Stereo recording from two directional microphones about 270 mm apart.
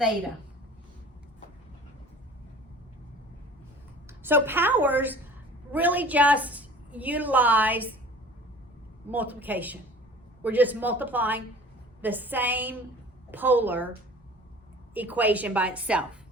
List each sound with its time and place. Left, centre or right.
4.2 s a man's voice: centre
9.0 s a man's voice: centre
14.9 s a woman's voice: centre